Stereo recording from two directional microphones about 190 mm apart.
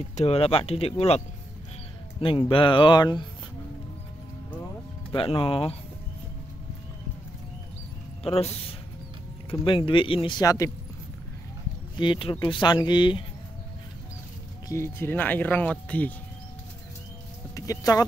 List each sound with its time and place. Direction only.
0.1 s speech: 35° left (ahead or behind)
5.1 s speech: 30° left (ahead or behind)
8.2 s speech: 30° left (ahead or behind)
9.5 s speech: 25° left (ahead or behind)
12.0 s speech: 25° left (ahead or behind)
14.7 s speech: 15° left (ahead or behind)
17.6 s speech: 20° left (ahead or behind)